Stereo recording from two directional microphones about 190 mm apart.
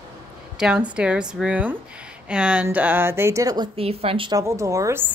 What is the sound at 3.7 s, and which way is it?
A woman's voice, 30° right (ahead or behind).